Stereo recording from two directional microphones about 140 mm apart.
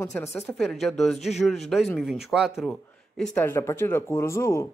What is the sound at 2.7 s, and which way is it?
Speech, 10° left (ahead or behind).